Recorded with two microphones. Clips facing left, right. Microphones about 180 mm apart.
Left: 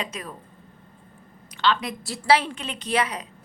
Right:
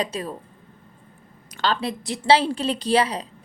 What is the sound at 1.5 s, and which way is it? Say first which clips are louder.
A woman's voice: even; 45° right (ahead or behind).